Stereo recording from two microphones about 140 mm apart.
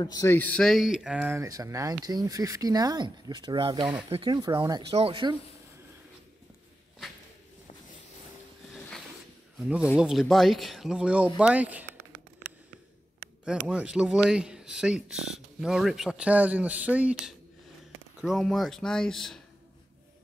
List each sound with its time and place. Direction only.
0.0 s speech: 30° left (ahead or behind)
0.3 s speech: 10° left (ahead or behind); by 1.4 s 10° right (ahead or behind)
1.4 s speech: 25° right (ahead or behind); by 5.3 s 40° right (ahead or behind)
9.6 s speech: 5° right (ahead or behind)
13.7 s speech: 5° right (ahead or behind)
18.2 s speech: centre (ahead or behind)